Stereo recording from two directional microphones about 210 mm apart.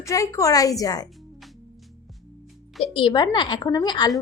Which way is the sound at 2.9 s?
25° left (ahead or behind).